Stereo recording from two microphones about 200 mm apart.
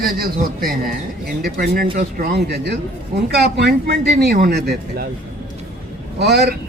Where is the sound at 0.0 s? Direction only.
50° right (ahead or behind).